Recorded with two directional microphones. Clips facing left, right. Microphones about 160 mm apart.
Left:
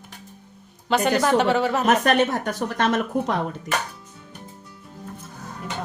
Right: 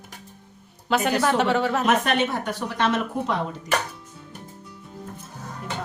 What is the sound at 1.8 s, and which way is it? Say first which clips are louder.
A woman's voice: left 3 dB; 45° left (ahead or behind).